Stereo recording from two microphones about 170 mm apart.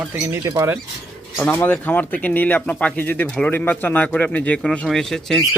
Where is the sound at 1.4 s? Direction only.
10° left (ahead or behind).